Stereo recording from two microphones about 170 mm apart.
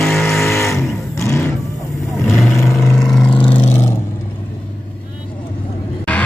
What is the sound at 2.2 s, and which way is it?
Vehicle, centre (ahead or behind).